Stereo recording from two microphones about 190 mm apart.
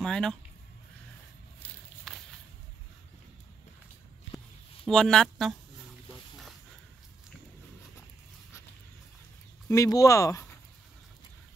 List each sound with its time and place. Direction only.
0.0 s speech: 5° left (ahead or behind)
2.1 s a sound: centre (ahead or behind)
4.8 s speech: 5° left (ahead or behind)
9.7 s speech: 15° left (ahead or behind)